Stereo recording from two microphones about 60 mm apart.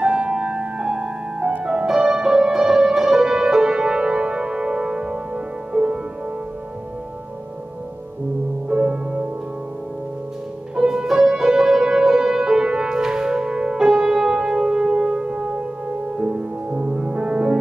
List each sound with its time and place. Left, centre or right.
0.0 s music: right
0.3 s piano: centre
1.6 s music: centre
8.6 s music: centre
10.8 s music: centre